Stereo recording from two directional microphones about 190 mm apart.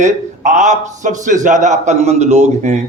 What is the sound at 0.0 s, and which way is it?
A man's voice, 40° right (ahead or behind).